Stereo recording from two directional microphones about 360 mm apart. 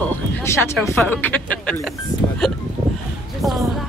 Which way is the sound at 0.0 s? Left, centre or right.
Centre.